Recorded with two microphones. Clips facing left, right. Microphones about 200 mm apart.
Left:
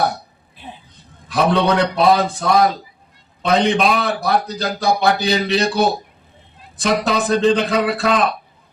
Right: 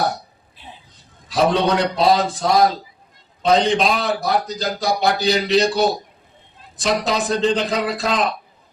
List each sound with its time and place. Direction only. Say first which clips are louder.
0.5 s music: left 5 dB; 55° left (ahead or behind)
1.3 s a man's voice: left 1 dB; 60° left (ahead or behind)